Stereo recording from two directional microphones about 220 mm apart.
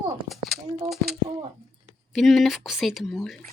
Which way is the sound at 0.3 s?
Centre (ahead or behind).